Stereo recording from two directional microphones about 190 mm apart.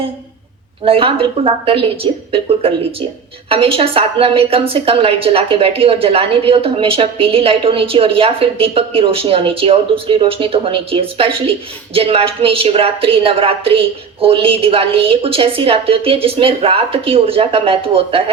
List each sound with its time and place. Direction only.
0.9 s a woman's voice: 30° right (ahead or behind)